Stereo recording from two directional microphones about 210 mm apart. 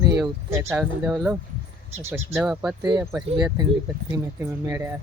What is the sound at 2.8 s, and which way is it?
Speech, 15° right (ahead or behind).